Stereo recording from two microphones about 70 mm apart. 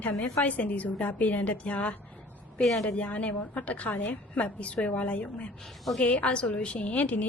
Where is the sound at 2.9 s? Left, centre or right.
Centre.